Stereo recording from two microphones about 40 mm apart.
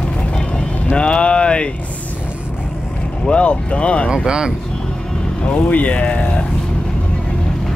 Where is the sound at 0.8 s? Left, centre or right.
Left.